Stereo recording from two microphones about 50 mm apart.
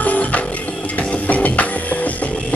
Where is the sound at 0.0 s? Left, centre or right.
Left.